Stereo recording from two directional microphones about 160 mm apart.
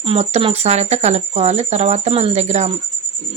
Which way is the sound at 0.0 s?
40° right (ahead or behind).